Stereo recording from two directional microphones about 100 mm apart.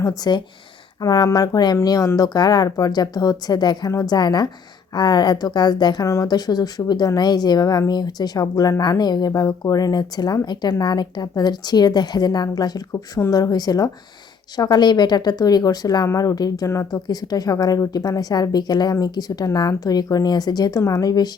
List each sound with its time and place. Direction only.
0.0 s speech: 40° left (ahead or behind)